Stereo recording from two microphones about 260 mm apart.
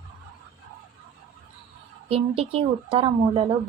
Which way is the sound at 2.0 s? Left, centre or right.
Right.